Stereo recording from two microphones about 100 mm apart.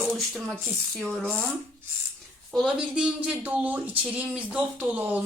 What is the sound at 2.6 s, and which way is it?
Speech, 10° right (ahead or behind).